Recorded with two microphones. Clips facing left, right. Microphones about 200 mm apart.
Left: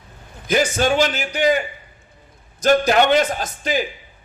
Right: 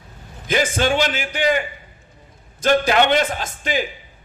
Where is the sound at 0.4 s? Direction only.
45° left (ahead or behind).